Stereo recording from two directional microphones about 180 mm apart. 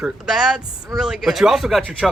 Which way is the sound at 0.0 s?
Centre (ahead or behind).